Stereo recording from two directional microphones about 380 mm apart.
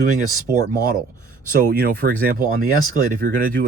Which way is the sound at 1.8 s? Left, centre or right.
Right.